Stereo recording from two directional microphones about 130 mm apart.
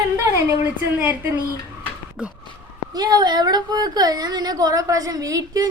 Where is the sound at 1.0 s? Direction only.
15° right (ahead or behind).